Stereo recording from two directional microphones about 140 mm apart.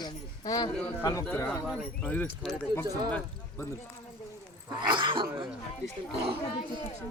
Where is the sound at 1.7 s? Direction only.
Centre (ahead or behind).